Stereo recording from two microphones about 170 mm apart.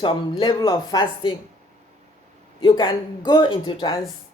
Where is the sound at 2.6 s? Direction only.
30° left (ahead or behind).